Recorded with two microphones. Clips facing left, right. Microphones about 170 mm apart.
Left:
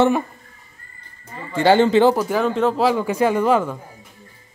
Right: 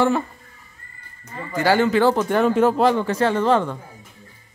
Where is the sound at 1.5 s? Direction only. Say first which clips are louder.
Left 4 dB; 25° left (ahead or behind).